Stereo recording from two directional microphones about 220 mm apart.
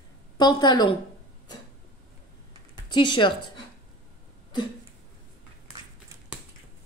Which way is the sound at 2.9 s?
20° left (ahead or behind).